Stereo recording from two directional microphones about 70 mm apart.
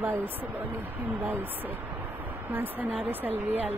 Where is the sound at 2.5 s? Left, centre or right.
Right.